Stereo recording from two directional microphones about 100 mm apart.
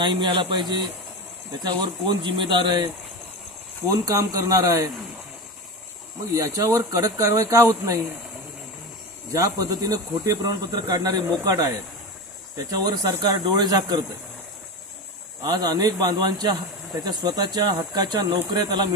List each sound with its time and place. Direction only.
0.0 s a man's voice: 55° right (ahead or behind)
3.9 s speech: 35° right (ahead or behind)
6.3 s speech: 35° right (ahead or behind)
9.3 s speech: 35° right (ahead or behind)
15.4 s a man's voice: 45° right (ahead or behind)